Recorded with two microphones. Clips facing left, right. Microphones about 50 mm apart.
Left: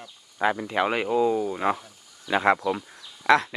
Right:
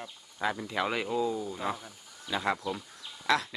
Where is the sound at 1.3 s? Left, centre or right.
Left.